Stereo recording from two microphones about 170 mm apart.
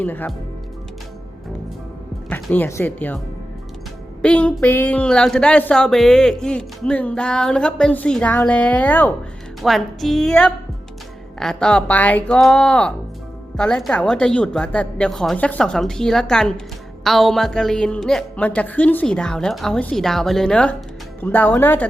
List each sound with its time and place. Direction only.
0.0 s speech: 10° left (ahead or behind)
2.3 s speech: 10° left (ahead or behind)
4.2 s a woman's voice: 5° left (ahead or behind)